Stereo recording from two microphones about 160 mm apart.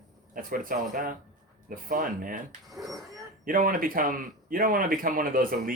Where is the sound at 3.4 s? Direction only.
60° right (ahead or behind).